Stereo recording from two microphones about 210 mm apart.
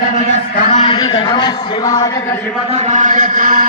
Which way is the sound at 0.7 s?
35° left (ahead or behind).